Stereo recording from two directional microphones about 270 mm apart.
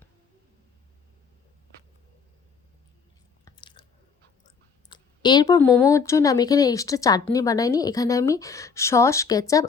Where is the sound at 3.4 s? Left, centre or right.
Centre.